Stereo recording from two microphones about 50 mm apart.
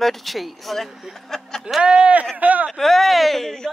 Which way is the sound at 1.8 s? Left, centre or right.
Centre.